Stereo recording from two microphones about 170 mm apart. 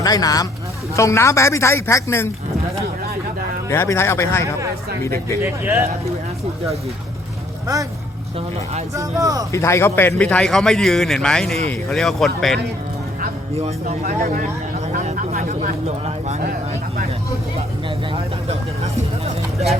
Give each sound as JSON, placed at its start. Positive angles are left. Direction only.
{"t": 0.0, "sound": "a man's voice", "side_deg": 20}
{"t": 3.7, "sound": "a man's voice", "side_deg": 15}
{"t": 5.4, "sound": "speech", "side_deg": -15}
{"t": 9.0, "sound": "speech", "side_deg": -20}
{"t": 9.5, "sound": "a man's voice", "side_deg": 15}
{"t": 13.7, "sound": "speech", "side_deg": -40}
{"t": 15.0, "sound": "a sound", "side_deg": -45}